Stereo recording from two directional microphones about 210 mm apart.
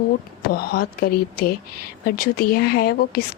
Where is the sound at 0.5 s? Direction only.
45° left (ahead or behind).